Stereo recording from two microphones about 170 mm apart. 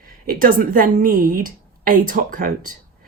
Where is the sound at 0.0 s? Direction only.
55° right (ahead or behind).